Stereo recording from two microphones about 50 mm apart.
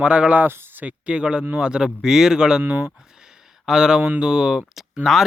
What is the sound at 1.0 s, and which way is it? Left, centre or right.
Speech, centre.